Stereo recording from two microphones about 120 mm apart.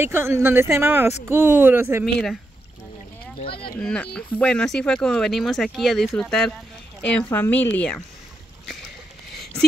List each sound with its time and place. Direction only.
0.0 s speech: 20° right (ahead or behind)
3.8 s speech: 5° left (ahead or behind)
7.2 s a woman's voice: 20° left (ahead or behind)